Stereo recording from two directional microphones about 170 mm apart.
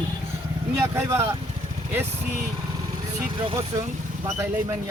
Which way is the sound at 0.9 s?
15° right (ahead or behind).